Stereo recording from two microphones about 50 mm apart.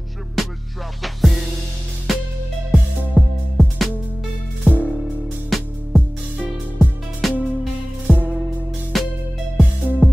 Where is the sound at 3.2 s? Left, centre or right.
Right.